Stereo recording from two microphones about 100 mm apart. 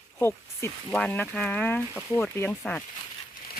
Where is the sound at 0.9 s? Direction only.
15° left (ahead or behind).